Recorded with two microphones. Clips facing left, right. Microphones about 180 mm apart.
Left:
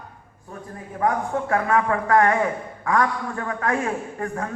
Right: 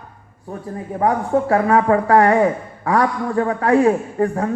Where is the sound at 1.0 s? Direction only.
35° right (ahead or behind).